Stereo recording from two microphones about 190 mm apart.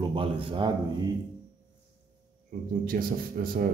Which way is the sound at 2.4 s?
50° right (ahead or behind).